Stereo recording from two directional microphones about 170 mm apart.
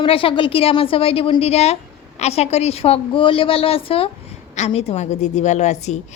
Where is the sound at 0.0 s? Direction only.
30° left (ahead or behind).